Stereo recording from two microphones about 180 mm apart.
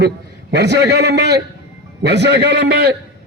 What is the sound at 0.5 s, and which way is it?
A man's voice, 70° right (ahead or behind).